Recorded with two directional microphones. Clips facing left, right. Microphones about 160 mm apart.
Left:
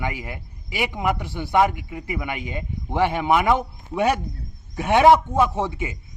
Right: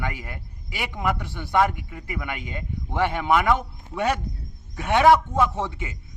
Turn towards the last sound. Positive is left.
turn(degrees=15)  # may be behind; listen again after turning